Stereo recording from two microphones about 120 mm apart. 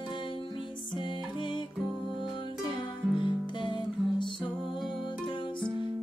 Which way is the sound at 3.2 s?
40° left (ahead or behind).